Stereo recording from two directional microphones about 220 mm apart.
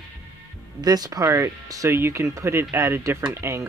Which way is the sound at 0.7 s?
15° right (ahead or behind).